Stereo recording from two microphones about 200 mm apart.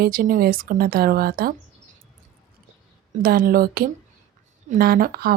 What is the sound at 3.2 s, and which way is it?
Speech, 45° right (ahead or behind).